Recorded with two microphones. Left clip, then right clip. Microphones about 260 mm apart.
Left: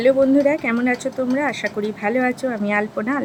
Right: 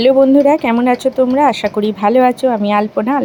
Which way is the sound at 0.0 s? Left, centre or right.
Centre.